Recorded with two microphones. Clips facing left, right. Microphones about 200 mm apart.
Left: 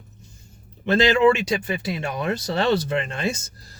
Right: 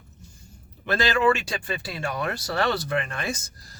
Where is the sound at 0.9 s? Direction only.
25° left (ahead or behind).